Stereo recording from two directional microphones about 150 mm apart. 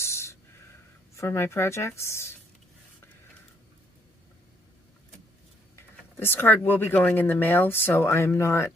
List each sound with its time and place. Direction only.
0.0 s a sound: 20° left (ahead or behind)
1.1 s speech: 15° left (ahead or behind)
6.1 s speech: 15° left (ahead or behind)